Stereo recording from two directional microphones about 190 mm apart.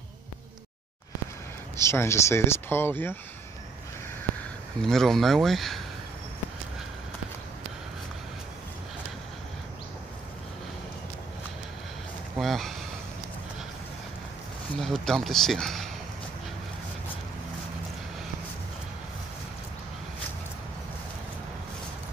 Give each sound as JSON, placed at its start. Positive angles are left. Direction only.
{"t": 1.8, "sound": "speech", "side_deg": 15}
{"t": 4.8, "sound": "speech", "side_deg": 0}
{"t": 12.4, "sound": "speech", "side_deg": 0}
{"t": 14.8, "sound": "speech", "side_deg": 0}